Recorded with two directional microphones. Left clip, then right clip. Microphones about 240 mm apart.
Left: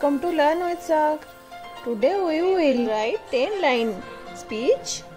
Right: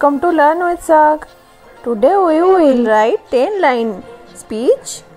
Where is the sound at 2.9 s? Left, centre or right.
Right.